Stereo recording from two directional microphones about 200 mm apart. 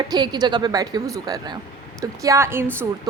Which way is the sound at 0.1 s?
20° right (ahead or behind).